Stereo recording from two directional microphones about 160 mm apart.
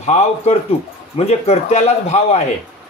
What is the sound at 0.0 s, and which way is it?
A man's voice, 45° left (ahead or behind).